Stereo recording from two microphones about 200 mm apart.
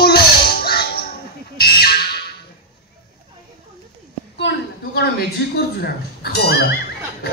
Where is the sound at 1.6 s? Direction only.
50° left (ahead or behind).